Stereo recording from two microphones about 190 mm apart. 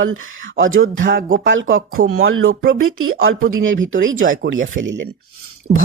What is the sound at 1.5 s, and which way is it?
Speech, 90° right.